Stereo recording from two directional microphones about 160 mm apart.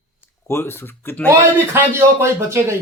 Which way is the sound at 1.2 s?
15° right (ahead or behind).